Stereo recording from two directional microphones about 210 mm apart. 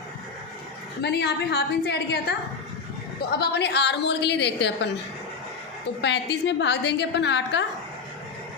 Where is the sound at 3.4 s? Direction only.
50° left (ahead or behind).